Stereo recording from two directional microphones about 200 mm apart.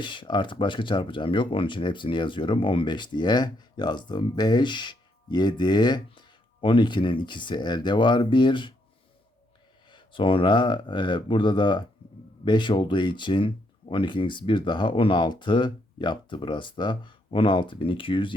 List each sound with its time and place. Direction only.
0.0 s speech: 25° left (ahead or behind)
9.9 s speech: 25° left (ahead or behind)